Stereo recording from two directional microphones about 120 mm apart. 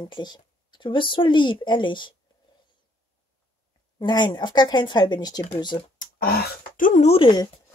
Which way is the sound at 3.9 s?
35° left (ahead or behind).